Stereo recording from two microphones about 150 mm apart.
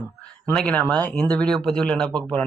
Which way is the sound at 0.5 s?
5° left (ahead or behind).